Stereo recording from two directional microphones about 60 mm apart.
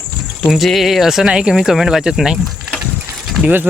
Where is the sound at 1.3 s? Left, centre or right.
Centre.